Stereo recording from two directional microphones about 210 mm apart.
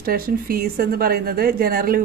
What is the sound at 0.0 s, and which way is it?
Speech, 45° right (ahead or behind).